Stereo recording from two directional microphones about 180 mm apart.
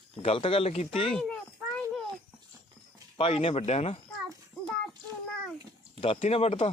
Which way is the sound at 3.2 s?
30° left (ahead or behind).